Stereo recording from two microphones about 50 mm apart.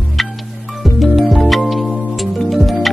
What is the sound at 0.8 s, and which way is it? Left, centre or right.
Music, centre.